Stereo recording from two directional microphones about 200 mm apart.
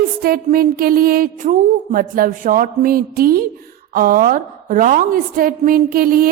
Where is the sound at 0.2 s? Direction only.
45° right (ahead or behind).